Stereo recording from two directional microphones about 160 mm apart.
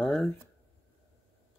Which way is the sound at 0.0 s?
5° left (ahead or behind).